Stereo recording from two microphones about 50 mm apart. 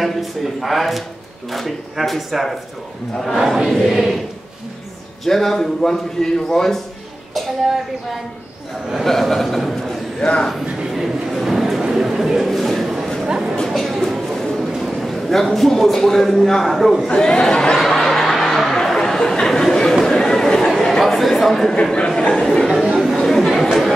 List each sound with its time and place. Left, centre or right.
0.0 s speech: centre
5.2 s a man's voice: centre
7.3 s speech: centre
10.2 s speech: centre
10.9 s a sound: centre
13.2 s a sound: centre
13.7 s a sound: centre
14.8 s a man's voice: centre
17.1 s a sound: centre
20.1 s chatter: centre
21.2 s speech: centre
21.9 s a man's voice: centre
22.8 s chatter: centre